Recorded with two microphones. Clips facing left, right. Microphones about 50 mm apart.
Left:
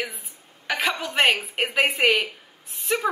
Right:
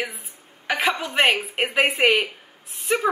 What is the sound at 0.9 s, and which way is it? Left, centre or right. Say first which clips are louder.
Speech: left 1 dB; centre.